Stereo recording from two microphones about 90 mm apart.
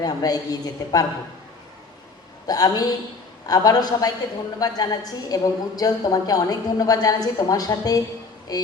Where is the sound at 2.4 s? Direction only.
45° left (ahead or behind).